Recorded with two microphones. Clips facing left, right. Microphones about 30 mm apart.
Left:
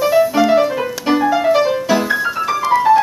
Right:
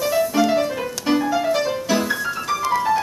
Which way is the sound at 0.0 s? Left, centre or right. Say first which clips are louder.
Left 6 dB; centre.